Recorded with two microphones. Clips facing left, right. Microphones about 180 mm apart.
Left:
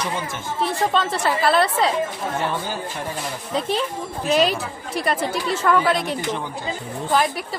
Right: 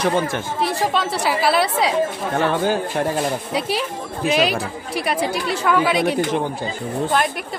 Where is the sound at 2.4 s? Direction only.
75° right (ahead or behind).